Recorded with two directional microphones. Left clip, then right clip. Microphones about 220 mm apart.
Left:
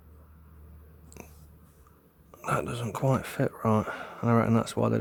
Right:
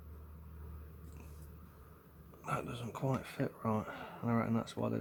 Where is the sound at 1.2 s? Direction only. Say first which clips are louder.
Left 13 dB; 45° left (ahead or behind).